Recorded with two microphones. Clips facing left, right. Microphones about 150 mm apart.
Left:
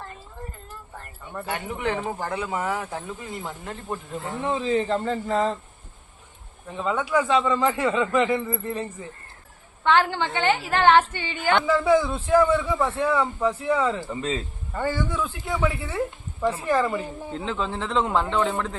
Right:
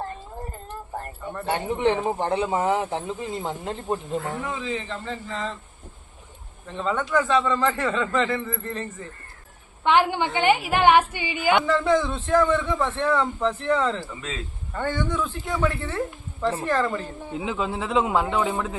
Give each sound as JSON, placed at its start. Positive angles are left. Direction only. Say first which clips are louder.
{"t": 1.5, "sound": "speech", "louder": "right 6 dB", "side_deg": -30}
{"t": 4.4, "sound": "speech", "louder": "left 7 dB", "side_deg": 35}
{"t": 6.7, "sound": "a man's voice", "louder": "even", "side_deg": 10}
{"t": 9.8, "sound": "a woman's voice", "louder": "right 1 dB", "side_deg": -15}
{"t": 11.6, "sound": "a man's voice", "louder": "left 1 dB", "side_deg": 5}
{"t": 14.1, "sound": "speech", "louder": "left 6 dB", "side_deg": 30}
{"t": 14.7, "sound": "a man's voice", "louder": "even", "side_deg": 5}
{"t": 17.3, "sound": "a woman's voice", "louder": "right 2 dB", "side_deg": -10}